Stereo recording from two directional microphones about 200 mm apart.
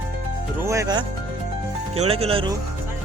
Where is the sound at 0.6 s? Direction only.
15° right (ahead or behind).